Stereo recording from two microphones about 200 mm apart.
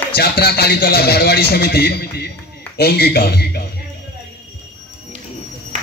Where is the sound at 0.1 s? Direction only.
50° left (ahead or behind).